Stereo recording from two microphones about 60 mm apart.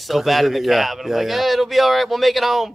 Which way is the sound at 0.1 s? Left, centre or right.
Centre.